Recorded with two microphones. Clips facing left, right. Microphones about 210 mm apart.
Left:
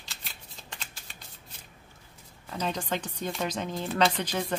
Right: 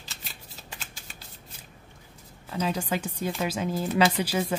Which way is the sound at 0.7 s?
5° right (ahead or behind).